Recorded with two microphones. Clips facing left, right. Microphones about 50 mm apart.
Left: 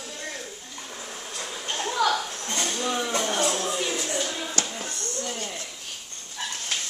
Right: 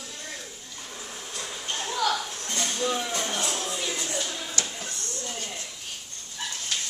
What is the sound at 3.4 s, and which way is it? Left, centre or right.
Music, centre.